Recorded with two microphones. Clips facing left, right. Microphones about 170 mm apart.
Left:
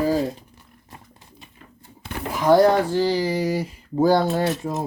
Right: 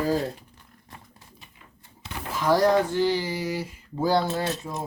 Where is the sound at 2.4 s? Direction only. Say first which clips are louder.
Left 5 dB; 30° left (ahead or behind).